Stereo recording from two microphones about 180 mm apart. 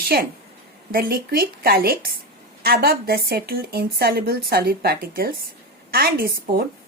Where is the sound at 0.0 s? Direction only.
60° right (ahead or behind).